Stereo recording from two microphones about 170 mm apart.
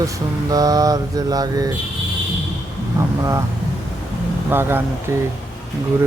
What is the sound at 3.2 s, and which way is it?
Mantra, 20° right (ahead or behind).